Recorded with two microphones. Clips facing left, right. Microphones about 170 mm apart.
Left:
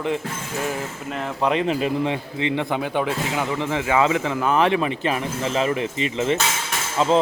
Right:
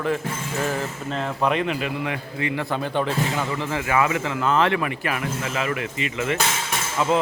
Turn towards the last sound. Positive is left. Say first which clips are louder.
# left 2 dB
turn(degrees=25)  # may be behind; listen again after turning